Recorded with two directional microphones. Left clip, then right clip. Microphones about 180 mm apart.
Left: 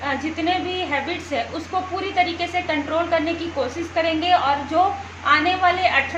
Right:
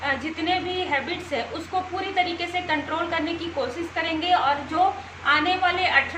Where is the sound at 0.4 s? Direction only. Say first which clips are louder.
Left 1 dB; 55° left (ahead or behind).